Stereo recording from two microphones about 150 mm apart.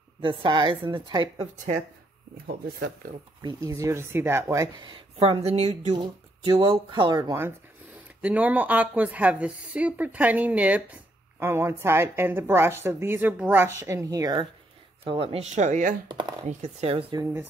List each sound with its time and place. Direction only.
0.2 s a woman's voice: 35° right (ahead or behind)
3.0 s speech: 70° right (ahead or behind)
3.4 s speech: 20° right (ahead or behind)
5.2 s speech: 40° right (ahead or behind)
5.9 s a woman's voice: 35° right (ahead or behind)
7.2 s a woman's voice: 15° right (ahead or behind); by 15.9 s 55° right (ahead or behind)
16.1 s a sound: 30° right (ahead or behind)
16.4 s speech: 45° right (ahead or behind)
17.1 s speech: 20° right (ahead or behind)